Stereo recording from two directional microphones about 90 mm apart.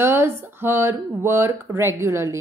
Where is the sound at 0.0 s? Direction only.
25° right (ahead or behind).